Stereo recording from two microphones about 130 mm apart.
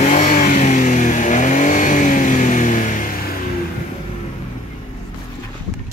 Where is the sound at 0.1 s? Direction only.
80° left.